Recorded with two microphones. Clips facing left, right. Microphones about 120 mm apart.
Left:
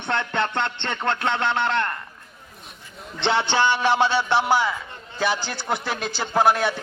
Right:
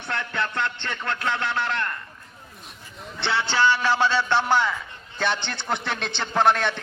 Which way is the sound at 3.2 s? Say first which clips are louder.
Left 2 dB; 20° left (ahead or behind).